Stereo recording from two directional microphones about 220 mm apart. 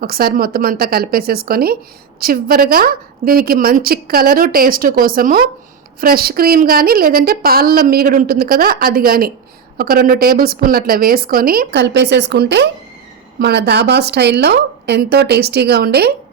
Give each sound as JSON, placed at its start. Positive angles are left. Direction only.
{"t": 0.0, "sound": "a woman's voice", "side_deg": -45}